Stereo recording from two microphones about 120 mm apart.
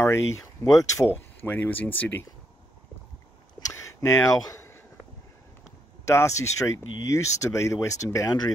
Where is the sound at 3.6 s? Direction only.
25° left (ahead or behind).